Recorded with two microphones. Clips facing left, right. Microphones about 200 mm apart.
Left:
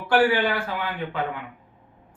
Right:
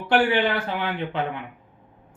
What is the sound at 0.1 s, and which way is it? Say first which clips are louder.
Speech: even; 20° right (ahead or behind).